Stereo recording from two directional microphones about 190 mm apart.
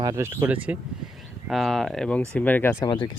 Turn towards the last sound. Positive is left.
turn(degrees=20)  # may be behind; listen again after turning